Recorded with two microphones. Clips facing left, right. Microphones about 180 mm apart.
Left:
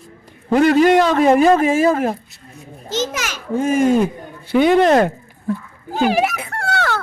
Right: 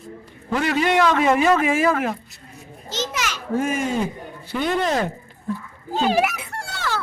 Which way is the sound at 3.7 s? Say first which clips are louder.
Left 9 dB; 50° left (ahead or behind).